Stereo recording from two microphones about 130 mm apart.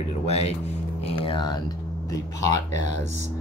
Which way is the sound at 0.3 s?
55° left (ahead or behind).